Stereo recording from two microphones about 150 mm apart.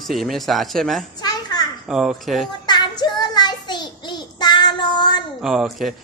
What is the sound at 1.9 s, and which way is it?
Speech, 5° right (ahead or behind).